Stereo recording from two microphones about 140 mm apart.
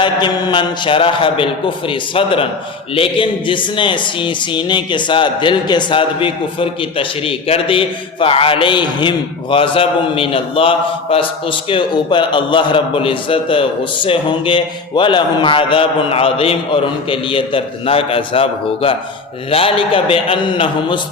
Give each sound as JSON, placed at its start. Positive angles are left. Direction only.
{"t": 0.0, "sound": "a man's voice", "side_deg": 35}